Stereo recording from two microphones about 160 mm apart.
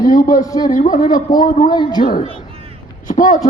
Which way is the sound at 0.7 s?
55° left (ahead or behind).